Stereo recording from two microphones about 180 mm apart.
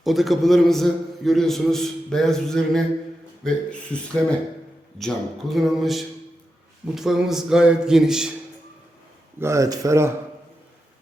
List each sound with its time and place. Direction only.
0.0 s a man's voice: centre (ahead or behind)
9.4 s speech: 15° right (ahead or behind)